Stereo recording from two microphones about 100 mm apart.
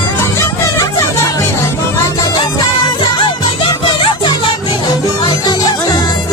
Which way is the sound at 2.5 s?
45° left (ahead or behind).